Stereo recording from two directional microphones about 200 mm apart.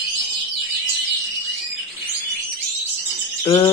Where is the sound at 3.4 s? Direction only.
15° left (ahead or behind).